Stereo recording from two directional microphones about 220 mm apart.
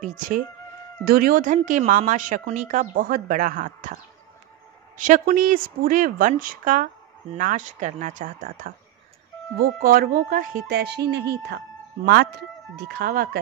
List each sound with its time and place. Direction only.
0.0 s a woman's voice: 35° right (ahead or behind)
4.9 s a woman's voice: 35° right (ahead or behind)